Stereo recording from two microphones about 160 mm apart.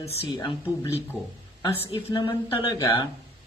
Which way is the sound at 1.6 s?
15° left (ahead or behind).